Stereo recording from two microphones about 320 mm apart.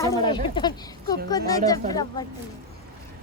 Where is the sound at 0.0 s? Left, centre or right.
Centre.